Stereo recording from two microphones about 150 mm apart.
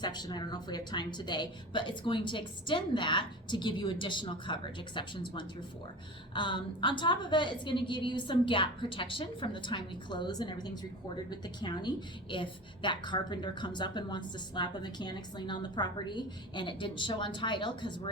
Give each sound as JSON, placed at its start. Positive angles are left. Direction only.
{"t": 0.0, "sound": "a woman's voice", "side_deg": 30}
{"t": 6.3, "sound": "a woman's voice", "side_deg": 35}